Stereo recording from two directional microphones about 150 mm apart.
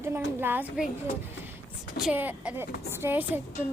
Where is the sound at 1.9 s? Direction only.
5° right (ahead or behind).